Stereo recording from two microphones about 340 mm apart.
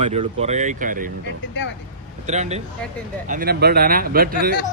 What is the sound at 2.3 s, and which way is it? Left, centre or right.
Speech, centre.